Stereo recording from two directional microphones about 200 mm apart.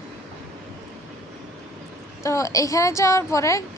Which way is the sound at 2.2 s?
15° left (ahead or behind).